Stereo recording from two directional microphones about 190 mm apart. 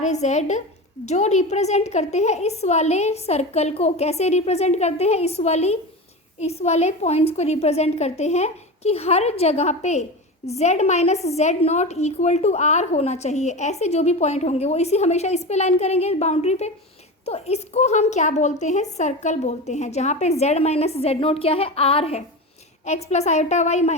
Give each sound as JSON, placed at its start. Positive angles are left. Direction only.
{"t": 0.0, "sound": "a woman's voice", "side_deg": 35}